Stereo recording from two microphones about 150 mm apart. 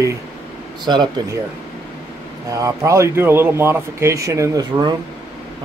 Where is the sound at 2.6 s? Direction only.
20° right (ahead or behind).